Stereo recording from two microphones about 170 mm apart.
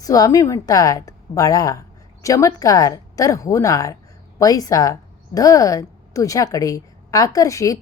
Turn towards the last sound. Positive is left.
turn(degrees=20)  # may be behind; listen again after turning